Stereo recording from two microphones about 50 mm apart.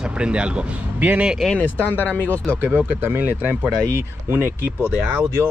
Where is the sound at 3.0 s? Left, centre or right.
Right.